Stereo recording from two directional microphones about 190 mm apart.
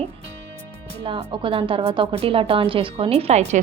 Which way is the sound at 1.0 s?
25° right (ahead or behind).